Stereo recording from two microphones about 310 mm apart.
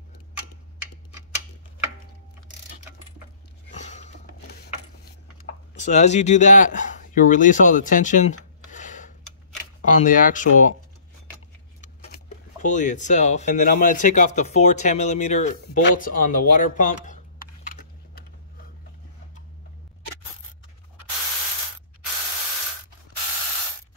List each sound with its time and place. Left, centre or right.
3.7 s a sound: left
5.8 s speech: left
11.8 s vehicle: left
12.6 s speech: left